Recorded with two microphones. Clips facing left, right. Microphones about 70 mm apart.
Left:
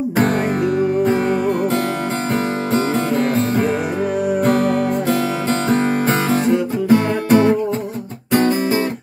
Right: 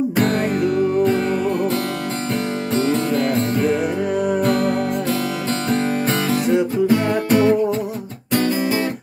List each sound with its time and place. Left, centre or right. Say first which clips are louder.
1.0 s music: left 1 dB; left
4.4 s music: left 5 dB; left
6.9 s music: left 8 dB; left